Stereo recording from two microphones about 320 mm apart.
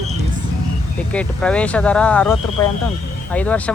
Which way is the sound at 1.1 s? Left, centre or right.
Centre.